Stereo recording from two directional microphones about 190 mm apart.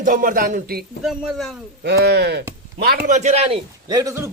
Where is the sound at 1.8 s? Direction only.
60° right (ahead or behind).